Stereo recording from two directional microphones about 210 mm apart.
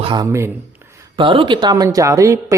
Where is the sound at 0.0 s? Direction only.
20° right (ahead or behind).